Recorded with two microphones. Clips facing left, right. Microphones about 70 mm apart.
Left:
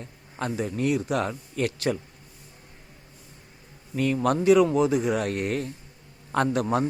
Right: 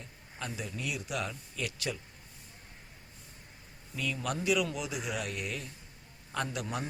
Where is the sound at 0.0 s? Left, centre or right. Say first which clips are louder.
Left 10 dB; left.